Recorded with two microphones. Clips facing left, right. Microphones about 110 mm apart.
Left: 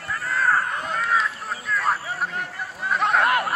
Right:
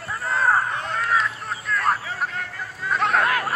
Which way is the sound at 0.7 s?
5° left (ahead or behind).